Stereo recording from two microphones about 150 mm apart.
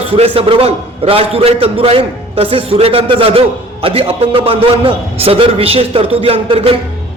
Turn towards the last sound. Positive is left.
turn(degrees=-40)  # may be behind; listen again after turning